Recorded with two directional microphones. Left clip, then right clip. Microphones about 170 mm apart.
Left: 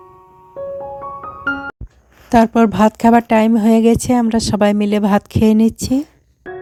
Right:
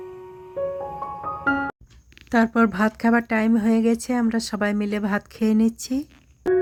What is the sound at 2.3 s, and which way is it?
Speech, 25° left (ahead or behind).